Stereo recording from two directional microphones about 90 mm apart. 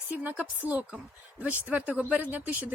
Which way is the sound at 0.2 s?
15° right (ahead or behind).